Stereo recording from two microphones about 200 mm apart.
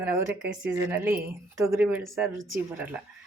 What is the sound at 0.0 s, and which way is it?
Speech, 10° right (ahead or behind).